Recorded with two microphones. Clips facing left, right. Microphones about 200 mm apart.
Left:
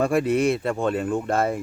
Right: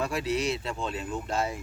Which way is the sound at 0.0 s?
55° left (ahead or behind).